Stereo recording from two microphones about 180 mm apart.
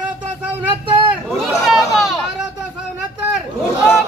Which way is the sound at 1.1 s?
Centre (ahead or behind).